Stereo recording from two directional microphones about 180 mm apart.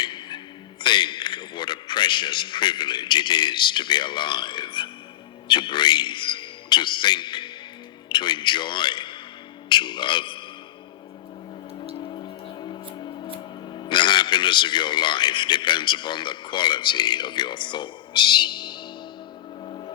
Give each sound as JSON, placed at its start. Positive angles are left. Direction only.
{"t": 0.0, "sound": "a man's voice", "side_deg": 25}
{"t": 9.6, "sound": "music", "side_deg": 25}
{"t": 11.8, "sound": "music", "side_deg": 30}
{"t": 13.7, "sound": "a man's voice", "side_deg": 25}
{"t": 19.6, "sound": "music", "side_deg": 30}